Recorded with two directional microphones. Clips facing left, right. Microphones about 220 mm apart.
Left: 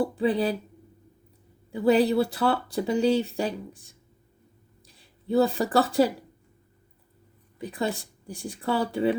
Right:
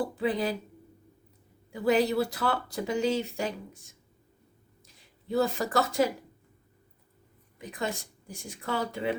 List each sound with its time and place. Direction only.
0.0 s speech: 30° left (ahead or behind)
1.7 s speech: 30° left (ahead or behind)
4.9 s speech: 30° left (ahead or behind)
7.6 s speech: 35° left (ahead or behind)